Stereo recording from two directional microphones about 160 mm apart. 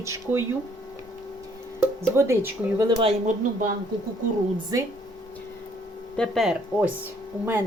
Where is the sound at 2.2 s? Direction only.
15° right (ahead or behind).